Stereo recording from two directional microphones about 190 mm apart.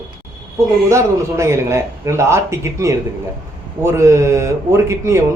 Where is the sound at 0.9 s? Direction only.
15° right (ahead or behind).